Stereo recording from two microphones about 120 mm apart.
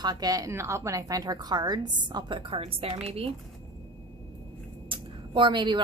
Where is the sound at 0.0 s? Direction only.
35° right (ahead or behind); by 3.2 s 55° right (ahead or behind).